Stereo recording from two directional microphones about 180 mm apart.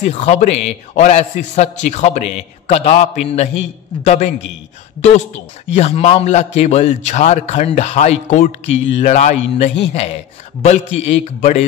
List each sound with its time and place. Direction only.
0.0 s a man's voice: 40° left (ahead or behind)
5.8 s a man's voice: 35° left (ahead or behind)